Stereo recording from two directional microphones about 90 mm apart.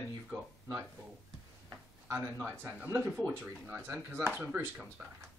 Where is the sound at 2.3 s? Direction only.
25° right (ahead or behind).